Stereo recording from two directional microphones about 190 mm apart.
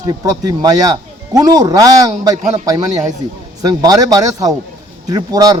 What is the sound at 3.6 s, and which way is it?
Speech, 20° right (ahead or behind).